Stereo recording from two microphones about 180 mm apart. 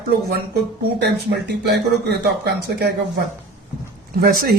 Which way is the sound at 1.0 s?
65° right (ahead or behind).